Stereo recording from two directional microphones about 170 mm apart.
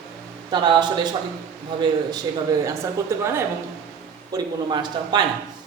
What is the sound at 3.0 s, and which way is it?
Speech, 15° right (ahead or behind).